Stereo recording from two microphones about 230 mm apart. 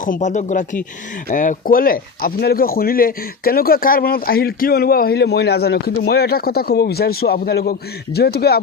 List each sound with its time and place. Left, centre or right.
0.0 s speech: left